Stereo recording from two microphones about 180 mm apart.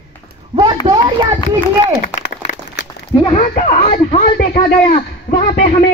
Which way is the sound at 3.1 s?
25° left (ahead or behind).